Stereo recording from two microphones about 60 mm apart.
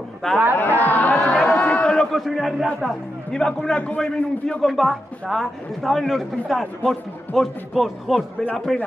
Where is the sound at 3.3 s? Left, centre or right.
Centre.